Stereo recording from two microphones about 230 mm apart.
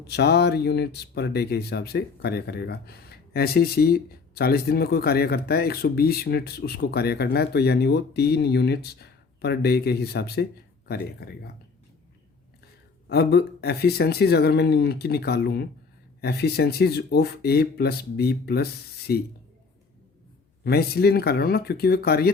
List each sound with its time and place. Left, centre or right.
0.0 s speech: left
13.1 s speech: left
20.7 s speech: left